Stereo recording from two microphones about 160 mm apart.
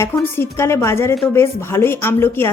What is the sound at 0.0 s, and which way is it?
Speech, 15° left (ahead or behind).